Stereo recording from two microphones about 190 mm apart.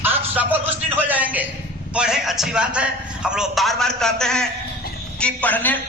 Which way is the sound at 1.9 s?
5° right (ahead or behind).